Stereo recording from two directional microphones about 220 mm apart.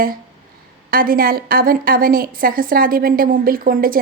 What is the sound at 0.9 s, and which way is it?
A woman's voice, 40° right (ahead or behind).